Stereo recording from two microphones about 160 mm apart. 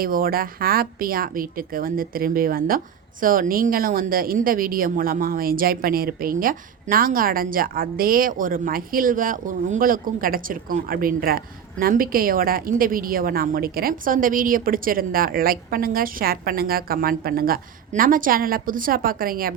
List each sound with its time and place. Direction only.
0.0 s speech: 65° right (ahead or behind)